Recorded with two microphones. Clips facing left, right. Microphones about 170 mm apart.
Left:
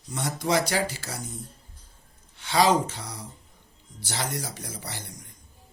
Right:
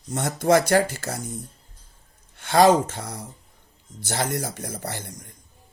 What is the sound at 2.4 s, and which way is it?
Speech, 55° right (ahead or behind).